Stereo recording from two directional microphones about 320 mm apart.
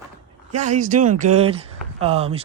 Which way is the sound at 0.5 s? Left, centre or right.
Right.